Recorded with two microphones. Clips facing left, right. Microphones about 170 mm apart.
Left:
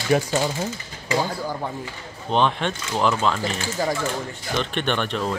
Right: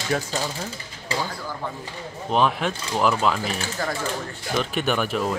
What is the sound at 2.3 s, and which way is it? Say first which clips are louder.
Speech: even; 5° right (ahead or behind).